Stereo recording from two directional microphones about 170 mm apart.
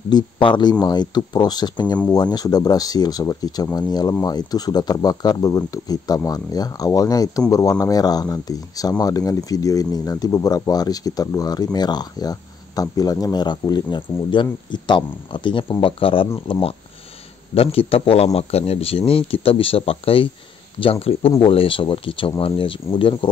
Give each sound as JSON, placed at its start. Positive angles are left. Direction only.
{"t": 0.1, "sound": "speech", "side_deg": 25}